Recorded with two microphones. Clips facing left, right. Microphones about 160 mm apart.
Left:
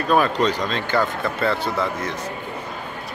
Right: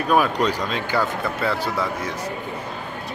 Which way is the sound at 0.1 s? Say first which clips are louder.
Left 1 dB; 10° right (ahead or behind).